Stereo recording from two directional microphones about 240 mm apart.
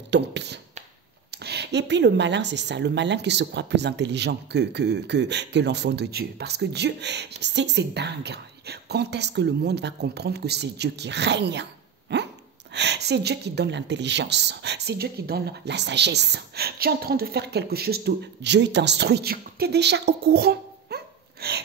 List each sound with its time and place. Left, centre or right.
0.1 s speech: right
12.1 s hiccup: right
12.7 s speech: right